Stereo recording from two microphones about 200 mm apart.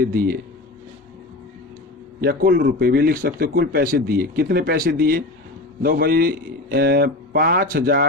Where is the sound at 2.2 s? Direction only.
50° right (ahead or behind).